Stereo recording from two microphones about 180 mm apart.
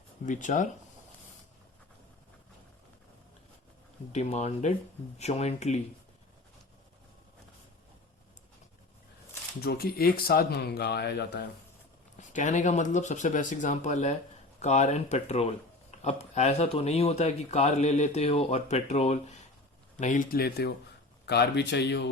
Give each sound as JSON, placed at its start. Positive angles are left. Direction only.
{"t": 0.3, "sound": "speech", "side_deg": 45}
{"t": 4.1, "sound": "speech", "side_deg": 40}
{"t": 9.6, "sound": "speech", "side_deg": 60}
{"t": 12.1, "sound": "speech", "side_deg": 45}